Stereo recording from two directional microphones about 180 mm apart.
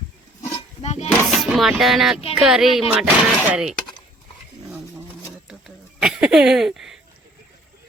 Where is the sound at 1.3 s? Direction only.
Centre (ahead or behind).